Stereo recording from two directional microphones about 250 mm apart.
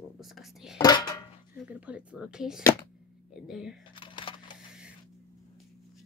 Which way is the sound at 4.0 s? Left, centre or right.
Centre.